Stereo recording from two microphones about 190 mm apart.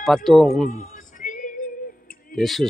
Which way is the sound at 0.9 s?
45° left (ahead or behind).